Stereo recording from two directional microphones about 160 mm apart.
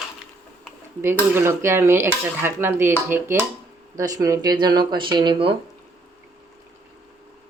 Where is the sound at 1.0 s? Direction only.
15° right (ahead or behind).